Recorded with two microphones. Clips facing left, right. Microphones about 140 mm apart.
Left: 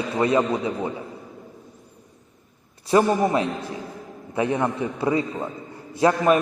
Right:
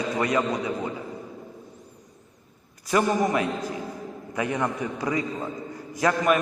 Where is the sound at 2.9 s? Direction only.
30° left (ahead or behind).